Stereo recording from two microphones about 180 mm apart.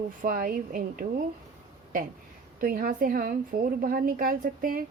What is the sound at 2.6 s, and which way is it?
A woman's voice, 55° right (ahead or behind).